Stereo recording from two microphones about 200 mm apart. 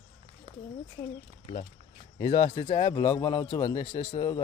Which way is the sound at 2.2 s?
25° left (ahead or behind).